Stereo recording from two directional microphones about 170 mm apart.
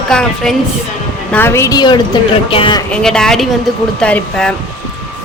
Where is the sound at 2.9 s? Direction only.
5° left (ahead or behind).